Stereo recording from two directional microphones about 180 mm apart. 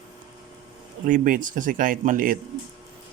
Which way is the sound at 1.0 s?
50° right (ahead or behind).